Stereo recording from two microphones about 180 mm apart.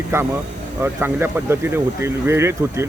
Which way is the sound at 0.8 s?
10° right (ahead or behind).